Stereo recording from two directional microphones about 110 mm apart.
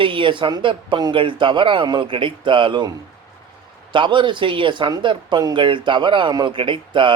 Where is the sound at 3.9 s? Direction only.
45° right (ahead or behind).